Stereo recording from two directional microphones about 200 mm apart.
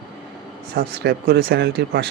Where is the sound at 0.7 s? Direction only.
50° right (ahead or behind).